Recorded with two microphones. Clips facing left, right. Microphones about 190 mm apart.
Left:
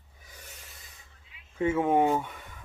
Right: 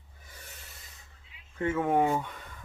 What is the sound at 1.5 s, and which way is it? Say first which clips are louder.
Speech: left 2 dB; 10° left (ahead or behind).